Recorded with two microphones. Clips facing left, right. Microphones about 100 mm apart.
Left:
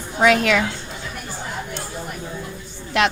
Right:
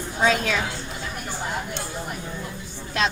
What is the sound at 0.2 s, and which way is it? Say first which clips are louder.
Speech: left 6 dB; 75° left (ahead or behind).